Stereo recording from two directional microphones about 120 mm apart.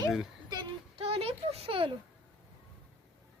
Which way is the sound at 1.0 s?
55° right (ahead or behind).